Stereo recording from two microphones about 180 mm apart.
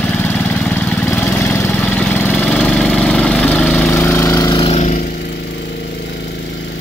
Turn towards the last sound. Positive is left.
turn(degrees=40)  # may be behind; listen again after turning